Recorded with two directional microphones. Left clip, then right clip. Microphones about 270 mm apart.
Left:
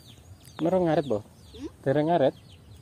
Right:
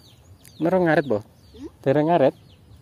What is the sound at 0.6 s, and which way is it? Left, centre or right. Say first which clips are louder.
Speech: right 5 dB; centre.